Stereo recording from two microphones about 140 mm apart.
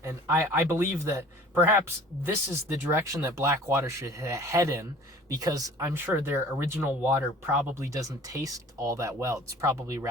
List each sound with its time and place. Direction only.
0.0 s speech: 20° right (ahead or behind)
2.2 s speech: 15° right (ahead or behind)